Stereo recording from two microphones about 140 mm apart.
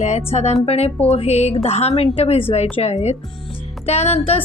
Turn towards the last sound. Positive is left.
turn(degrees=50)  # may be behind; listen again after turning